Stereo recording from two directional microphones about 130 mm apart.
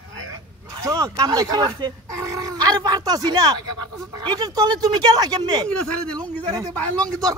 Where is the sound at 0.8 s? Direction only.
25° right (ahead or behind).